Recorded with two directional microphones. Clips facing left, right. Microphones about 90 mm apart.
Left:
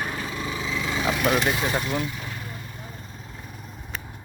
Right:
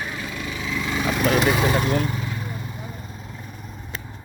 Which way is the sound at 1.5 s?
60° right (ahead or behind).